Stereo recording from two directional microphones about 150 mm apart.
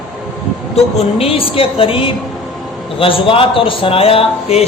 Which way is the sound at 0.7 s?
40° left (ahead or behind).